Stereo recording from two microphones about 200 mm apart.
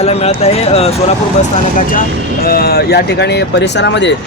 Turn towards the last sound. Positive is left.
turn(degrees=60)  # may be behind; listen again after turning